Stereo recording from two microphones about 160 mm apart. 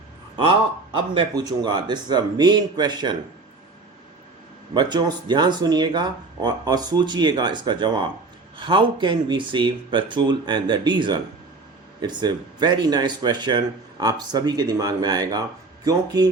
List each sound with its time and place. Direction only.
0.9 s speech: 25° right (ahead or behind)
4.7 s speech: 25° right (ahead or behind)